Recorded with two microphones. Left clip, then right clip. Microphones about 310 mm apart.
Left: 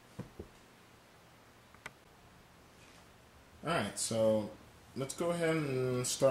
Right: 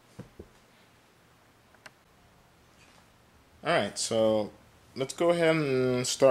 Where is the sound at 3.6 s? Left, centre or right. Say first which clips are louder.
Right 8 dB; centre.